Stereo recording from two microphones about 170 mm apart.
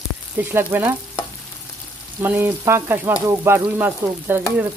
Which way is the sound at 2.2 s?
15° right (ahead or behind).